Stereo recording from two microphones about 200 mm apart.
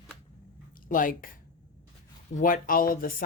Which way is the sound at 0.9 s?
45° left (ahead or behind).